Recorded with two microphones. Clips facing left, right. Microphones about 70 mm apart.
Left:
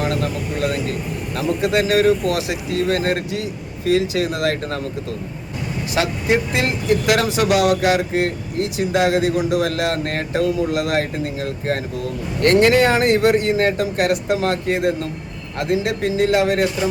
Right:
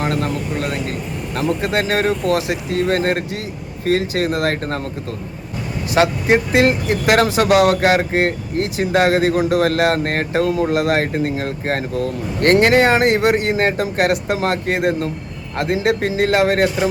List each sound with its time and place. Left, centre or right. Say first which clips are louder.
0.0 s speech: right 1 dB; right
5.9 s speech: right 4 dB; right